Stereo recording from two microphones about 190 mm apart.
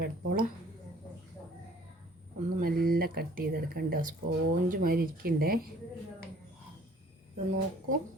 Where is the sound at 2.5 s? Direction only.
50° right (ahead or behind).